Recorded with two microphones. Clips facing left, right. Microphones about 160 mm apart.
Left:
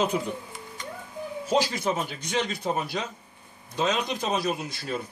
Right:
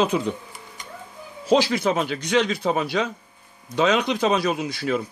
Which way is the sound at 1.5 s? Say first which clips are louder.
Right 6 dB; 80° right.